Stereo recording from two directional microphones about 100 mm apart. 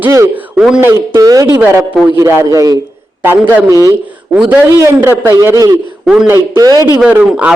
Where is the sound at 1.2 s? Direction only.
35° right (ahead or behind).